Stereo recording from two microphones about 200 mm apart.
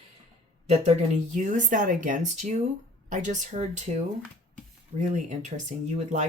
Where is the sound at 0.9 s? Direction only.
35° right (ahead or behind).